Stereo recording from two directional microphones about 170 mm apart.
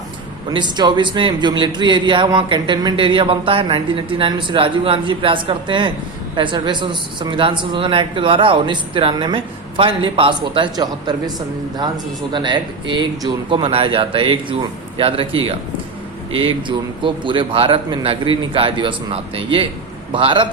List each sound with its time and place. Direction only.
0.5 s a man's voice: 25° right (ahead or behind)
12.3 s a man's voice: 30° right (ahead or behind)